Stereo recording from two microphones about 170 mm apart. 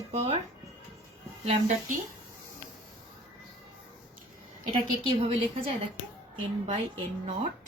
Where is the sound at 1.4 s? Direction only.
50° right (ahead or behind).